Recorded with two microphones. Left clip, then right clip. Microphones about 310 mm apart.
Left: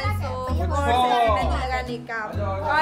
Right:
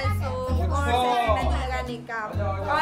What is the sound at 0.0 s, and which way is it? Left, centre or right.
Music, centre.